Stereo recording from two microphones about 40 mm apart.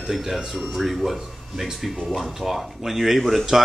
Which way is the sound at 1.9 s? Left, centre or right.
Centre.